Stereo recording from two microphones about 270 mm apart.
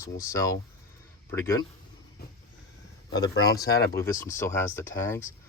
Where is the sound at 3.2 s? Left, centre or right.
Centre.